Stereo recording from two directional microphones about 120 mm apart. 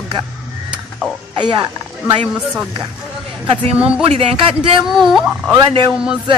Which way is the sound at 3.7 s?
10° right (ahead or behind).